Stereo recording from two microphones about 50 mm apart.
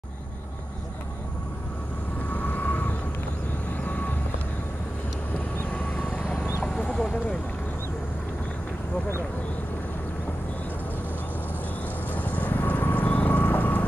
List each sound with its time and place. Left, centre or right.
2.3 s vehicle: left
5.7 s vehicle: left
6.6 s a sound: left
12.1 s vehicle: left